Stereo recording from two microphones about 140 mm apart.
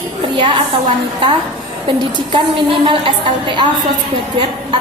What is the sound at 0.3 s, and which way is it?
Speech, 35° right (ahead or behind).